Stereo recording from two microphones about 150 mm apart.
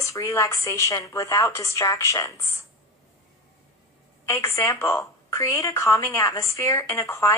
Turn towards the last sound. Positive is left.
turn(degrees=20)  # may be behind; listen again after turning